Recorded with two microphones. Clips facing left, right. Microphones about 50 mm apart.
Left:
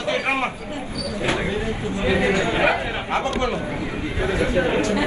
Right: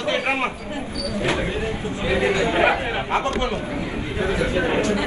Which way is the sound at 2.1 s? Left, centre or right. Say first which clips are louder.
Even; left.